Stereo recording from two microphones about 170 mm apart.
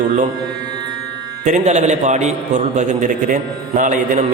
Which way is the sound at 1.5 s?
45° right (ahead or behind).